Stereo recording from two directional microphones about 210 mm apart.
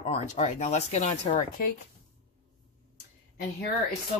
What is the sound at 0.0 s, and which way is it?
Speech, 35° left (ahead or behind).